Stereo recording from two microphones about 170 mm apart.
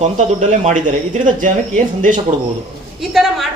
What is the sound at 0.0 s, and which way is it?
Speech, 45° right (ahead or behind).